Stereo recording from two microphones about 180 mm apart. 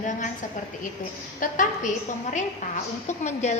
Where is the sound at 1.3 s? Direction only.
45° left (ahead or behind).